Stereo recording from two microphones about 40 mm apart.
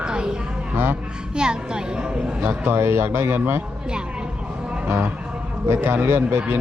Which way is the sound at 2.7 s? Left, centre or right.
Right.